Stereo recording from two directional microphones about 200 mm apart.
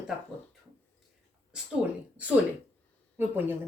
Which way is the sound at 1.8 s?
5° right (ahead or behind).